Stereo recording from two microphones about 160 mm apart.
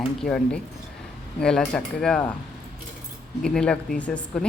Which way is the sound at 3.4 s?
5° left (ahead or behind).